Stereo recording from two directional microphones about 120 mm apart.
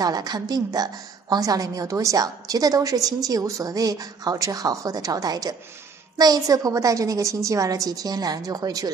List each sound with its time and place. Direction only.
0.0 s a woman's voice: 35° right (ahead or behind)